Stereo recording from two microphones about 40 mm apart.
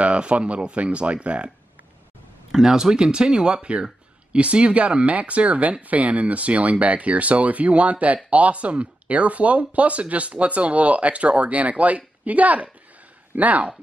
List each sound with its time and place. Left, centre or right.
0.0 s speech: right
2.6 s speech: centre; by 13.7 s right